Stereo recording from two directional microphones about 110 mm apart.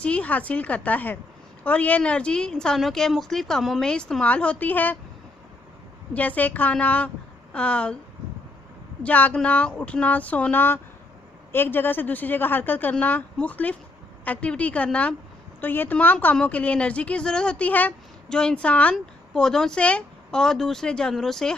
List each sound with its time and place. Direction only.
0.0 s speech: 10° left (ahead or behind)
6.1 s speech: 15° left (ahead or behind)
9.0 s speech: 15° left (ahead or behind)